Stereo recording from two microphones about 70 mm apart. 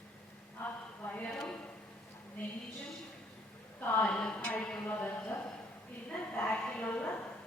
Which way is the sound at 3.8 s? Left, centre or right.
Left.